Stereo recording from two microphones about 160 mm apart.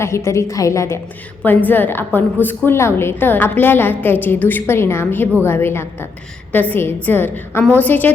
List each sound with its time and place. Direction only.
0.0 s a woman's voice: 20° left (ahead or behind)